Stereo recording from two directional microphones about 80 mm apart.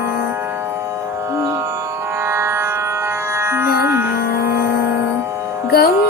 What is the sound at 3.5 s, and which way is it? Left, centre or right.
Music, right.